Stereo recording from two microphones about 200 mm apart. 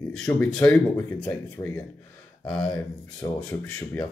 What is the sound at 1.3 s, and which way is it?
Speech, 15° left (ahead or behind).